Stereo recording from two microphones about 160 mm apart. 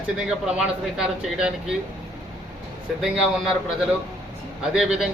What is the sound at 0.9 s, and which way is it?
Speech, 5° right (ahead or behind).